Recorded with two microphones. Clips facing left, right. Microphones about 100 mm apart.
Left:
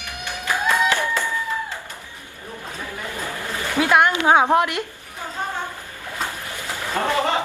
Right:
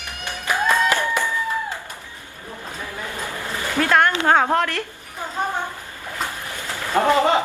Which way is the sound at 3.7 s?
10° left (ahead or behind).